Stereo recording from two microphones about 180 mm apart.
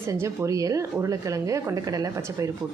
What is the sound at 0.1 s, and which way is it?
A woman's voice, 20° right (ahead or behind).